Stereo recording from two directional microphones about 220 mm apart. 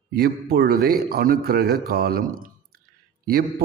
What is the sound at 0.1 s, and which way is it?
Speech, 45° right (ahead or behind).